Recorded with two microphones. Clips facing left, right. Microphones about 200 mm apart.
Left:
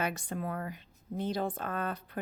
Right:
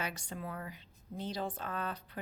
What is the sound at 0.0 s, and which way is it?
Speech, 50° left (ahead or behind).